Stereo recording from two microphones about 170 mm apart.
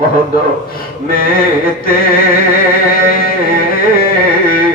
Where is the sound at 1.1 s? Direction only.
60° left (ahead or behind).